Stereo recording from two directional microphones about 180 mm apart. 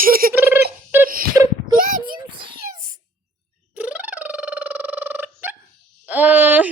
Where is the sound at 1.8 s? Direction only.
50° right (ahead or behind).